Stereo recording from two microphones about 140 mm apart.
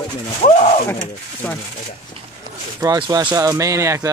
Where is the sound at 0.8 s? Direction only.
15° left (ahead or behind).